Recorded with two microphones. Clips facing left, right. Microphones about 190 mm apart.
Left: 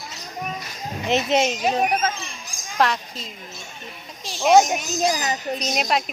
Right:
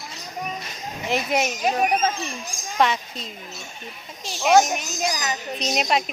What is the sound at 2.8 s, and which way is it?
A woman's voice, centre (ahead or behind).